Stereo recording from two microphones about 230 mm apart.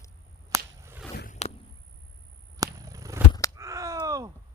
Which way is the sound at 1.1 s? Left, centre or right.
Left.